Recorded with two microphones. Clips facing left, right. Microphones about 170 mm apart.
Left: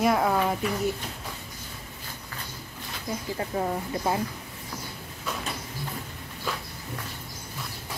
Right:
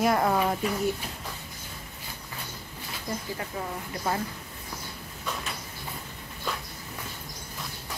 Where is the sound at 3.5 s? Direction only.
35° left (ahead or behind).